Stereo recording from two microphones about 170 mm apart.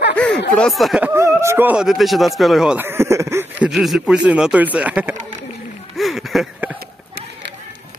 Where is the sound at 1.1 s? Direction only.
15° right (ahead or behind).